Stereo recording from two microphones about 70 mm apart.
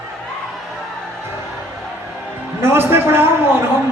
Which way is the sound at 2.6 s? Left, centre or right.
Right.